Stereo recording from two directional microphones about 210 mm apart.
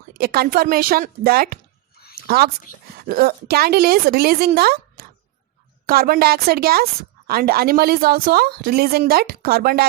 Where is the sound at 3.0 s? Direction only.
45° right (ahead or behind).